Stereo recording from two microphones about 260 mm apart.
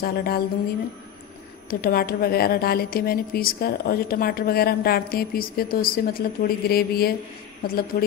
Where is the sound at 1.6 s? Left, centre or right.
Left.